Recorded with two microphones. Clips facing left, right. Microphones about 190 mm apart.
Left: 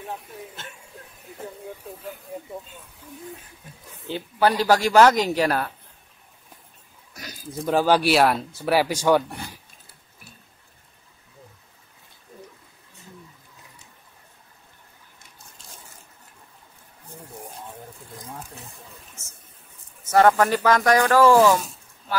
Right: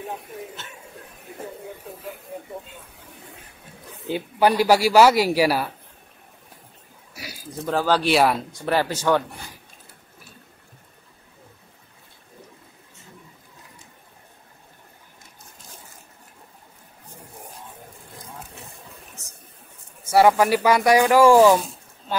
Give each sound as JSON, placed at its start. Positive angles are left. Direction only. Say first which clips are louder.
{"t": 4.1, "sound": "speech", "louder": "right 2 dB", "side_deg": -15}
{"t": 7.6, "sound": "speech", "louder": "left 2 dB", "side_deg": 15}
{"t": 8.1, "sound": "speech", "louder": "even", "side_deg": 0}
{"t": 20.1, "sound": "speech", "louder": "right 1 dB", "side_deg": -10}